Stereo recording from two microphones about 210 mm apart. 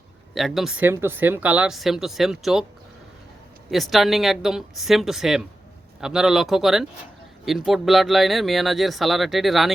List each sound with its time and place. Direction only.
0.3 s speech: centre (ahead or behind)
3.7 s speech: centre (ahead or behind)